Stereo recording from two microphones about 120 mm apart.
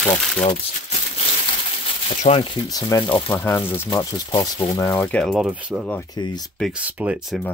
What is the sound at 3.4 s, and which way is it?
Speech, 15° left (ahead or behind).